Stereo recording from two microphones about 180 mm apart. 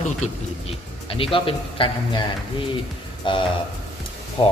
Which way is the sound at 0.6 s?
30° left (ahead or behind).